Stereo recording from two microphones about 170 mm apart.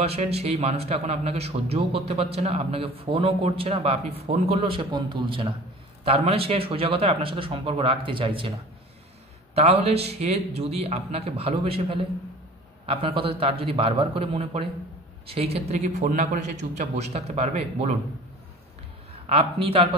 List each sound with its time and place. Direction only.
0.0 s speech: 35° right (ahead or behind)
9.6 s speech: 35° right (ahead or behind)
19.2 s speech: 35° right (ahead or behind)